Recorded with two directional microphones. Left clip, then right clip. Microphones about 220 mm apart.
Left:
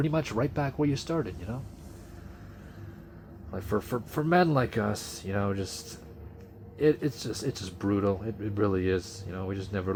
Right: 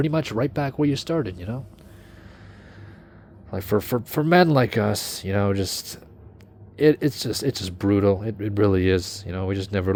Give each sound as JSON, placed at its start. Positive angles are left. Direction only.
{"t": 0.0, "sound": "speech", "side_deg": -25}
{"t": 3.5, "sound": "speech", "side_deg": -30}